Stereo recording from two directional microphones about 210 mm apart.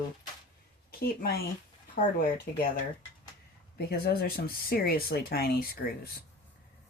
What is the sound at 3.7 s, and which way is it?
Speech, 50° left (ahead or behind).